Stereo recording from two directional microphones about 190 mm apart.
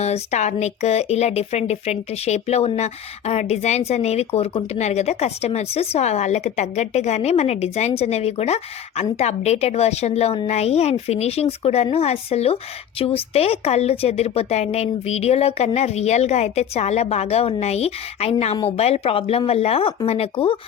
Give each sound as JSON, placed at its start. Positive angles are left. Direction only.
{"t": 0.0, "sound": "speech", "side_deg": 35}